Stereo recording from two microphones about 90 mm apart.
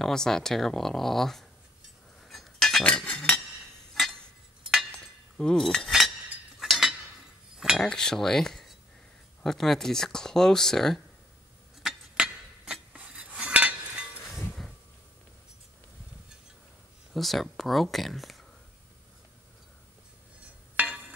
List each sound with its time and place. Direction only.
0.0 s speech: 5° left (ahead or behind)
2.2 s cutlery: centre (ahead or behind)
2.8 s chink: 15° left (ahead or behind)
6.6 s cutlery: centre (ahead or behind)
7.8 s speech: 5° left (ahead or behind)
11.8 s cutlery: 5° right (ahead or behind)
14.2 s a sound: centre (ahead or behind)
17.1 s speech: centre (ahead or behind)
20.7 s a sound: 15° right (ahead or behind)